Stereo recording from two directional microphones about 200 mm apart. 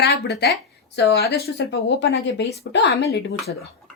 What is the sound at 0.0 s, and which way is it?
Speech, 55° left (ahead or behind).